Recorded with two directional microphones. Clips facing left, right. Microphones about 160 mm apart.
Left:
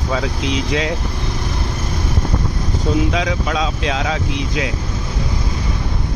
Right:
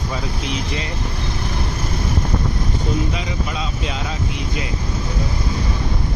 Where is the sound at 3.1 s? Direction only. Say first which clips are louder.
Left 6 dB; 90° left.